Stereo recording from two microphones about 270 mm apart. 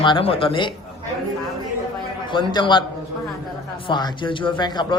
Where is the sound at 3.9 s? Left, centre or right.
Centre.